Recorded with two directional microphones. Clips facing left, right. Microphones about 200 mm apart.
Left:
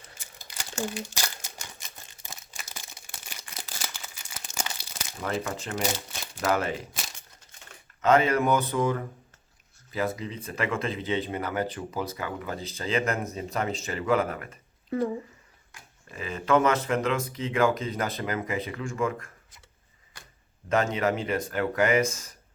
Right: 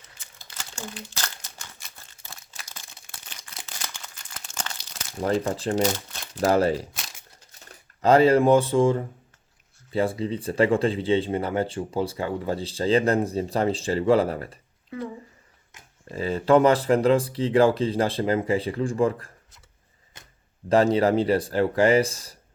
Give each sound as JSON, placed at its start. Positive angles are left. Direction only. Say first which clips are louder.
{"t": 0.5, "sound": "crumpling", "louder": "left 6 dB", "side_deg": 15}
{"t": 1.6, "sound": "a sound", "louder": "left 1 dB", "side_deg": 15}
{"t": 2.6, "sound": "crumpling", "louder": "left 1 dB", "side_deg": 5}
{"t": 3.2, "sound": "a sound", "louder": "left 1 dB", "side_deg": 5}
{"t": 5.2, "sound": "speech", "louder": "right 7 dB", "side_deg": -30}
{"t": 5.8, "sound": "crumpling", "louder": "right 6 dB", "side_deg": 10}
{"t": 6.4, "sound": "speech", "louder": "right 6 dB", "side_deg": -35}
{"t": 14.8, "sound": "speech", "louder": "left 6 dB", "side_deg": 45}
{"t": 15.7, "sound": "a sound", "louder": "even", "side_deg": -20}
{"t": 16.1, "sound": "speech", "louder": "right 5 dB", "side_deg": -35}
{"t": 20.1, "sound": "a sound", "louder": "even", "side_deg": -20}
{"t": 20.7, "sound": "speech", "louder": "right 6 dB", "side_deg": -35}